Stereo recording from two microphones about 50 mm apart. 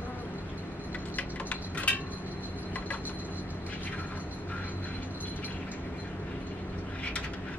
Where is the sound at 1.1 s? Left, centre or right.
Left.